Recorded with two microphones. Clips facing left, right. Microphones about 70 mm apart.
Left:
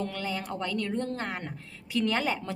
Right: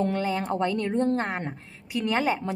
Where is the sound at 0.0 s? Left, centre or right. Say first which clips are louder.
Right 7 dB; right.